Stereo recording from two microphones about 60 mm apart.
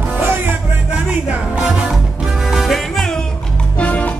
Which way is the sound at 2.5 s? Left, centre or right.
Centre.